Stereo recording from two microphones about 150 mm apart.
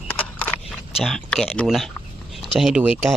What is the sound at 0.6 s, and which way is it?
Speech, centre (ahead or behind).